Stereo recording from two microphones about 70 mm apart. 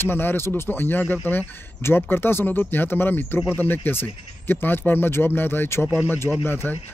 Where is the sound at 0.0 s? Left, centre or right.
Left.